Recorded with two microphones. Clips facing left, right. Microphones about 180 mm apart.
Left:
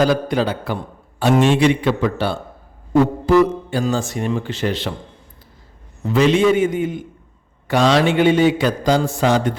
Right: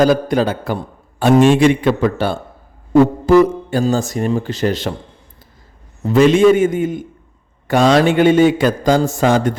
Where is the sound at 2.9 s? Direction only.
45° right (ahead or behind).